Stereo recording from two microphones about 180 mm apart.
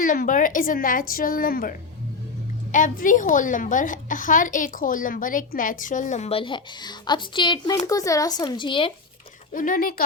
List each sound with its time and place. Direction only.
0.0 s a woman's voice: 50° left (ahead or behind)
2.7 s a woman's voice: 45° left (ahead or behind); by 8.9 s 25° left (ahead or behind)
9.5 s a woman's voice: 50° left (ahead or behind)